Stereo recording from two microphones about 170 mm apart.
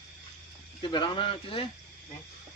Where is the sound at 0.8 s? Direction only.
30° left (ahead or behind).